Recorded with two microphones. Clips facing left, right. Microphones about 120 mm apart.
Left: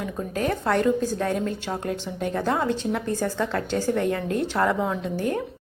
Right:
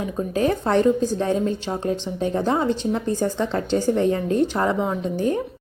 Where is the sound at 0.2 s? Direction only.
20° right (ahead or behind).